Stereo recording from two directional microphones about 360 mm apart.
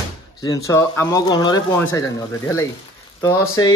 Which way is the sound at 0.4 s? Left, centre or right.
Centre.